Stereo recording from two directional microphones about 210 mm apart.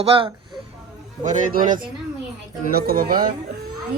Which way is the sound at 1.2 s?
35° right (ahead or behind).